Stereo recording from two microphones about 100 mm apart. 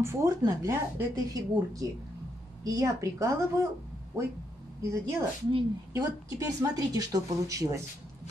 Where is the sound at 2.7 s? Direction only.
35° right (ahead or behind).